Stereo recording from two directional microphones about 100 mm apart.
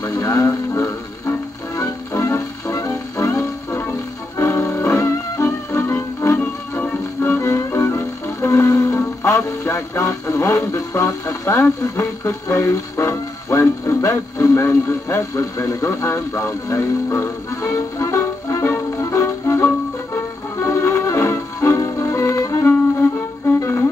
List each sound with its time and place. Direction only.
0.0 s music: 35° left (ahead or behind)
11.8 s speech: 30° left (ahead or behind)
20.6 s music: 30° left (ahead or behind)
22.7 s music: 20° left (ahead or behind)